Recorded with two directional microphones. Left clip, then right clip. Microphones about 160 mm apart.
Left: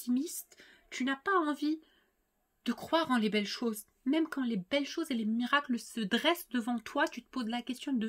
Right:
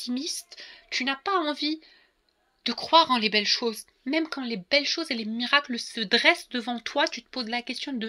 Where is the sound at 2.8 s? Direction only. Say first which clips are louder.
Right 11 dB; 45° left (ahead or behind).